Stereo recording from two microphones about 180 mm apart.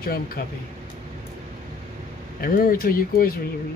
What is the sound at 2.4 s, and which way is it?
Speech, 55° left (ahead or behind).